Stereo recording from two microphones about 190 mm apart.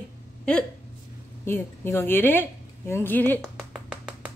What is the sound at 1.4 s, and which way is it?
A woman's voice, 15° left (ahead or behind).